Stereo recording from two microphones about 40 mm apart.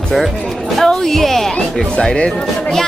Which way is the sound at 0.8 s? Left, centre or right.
Centre.